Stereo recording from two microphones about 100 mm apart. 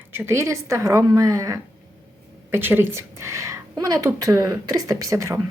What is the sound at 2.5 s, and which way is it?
A woman's voice, 20° right (ahead or behind).